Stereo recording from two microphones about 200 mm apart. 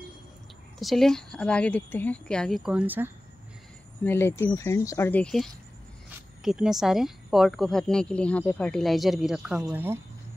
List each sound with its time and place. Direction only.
0.7 s speech: centre (ahead or behind)
4.0 s speech: 10° left (ahead or behind); by 9.9 s 5° right (ahead or behind)